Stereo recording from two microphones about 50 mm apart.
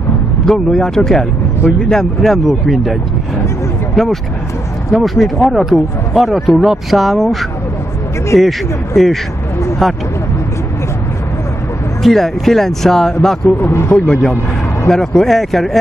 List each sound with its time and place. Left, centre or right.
0.5 s speech: centre
8.4 s speech: centre
12.0 s speech: centre
13.6 s a man's voice: left
14.0 s speech: centre